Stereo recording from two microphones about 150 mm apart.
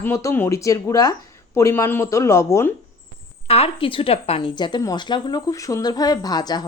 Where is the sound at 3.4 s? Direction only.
40° left (ahead or behind).